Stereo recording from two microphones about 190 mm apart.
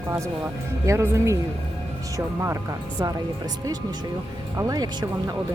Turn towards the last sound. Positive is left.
turn(degrees=-20)  # may be behind; listen again after turning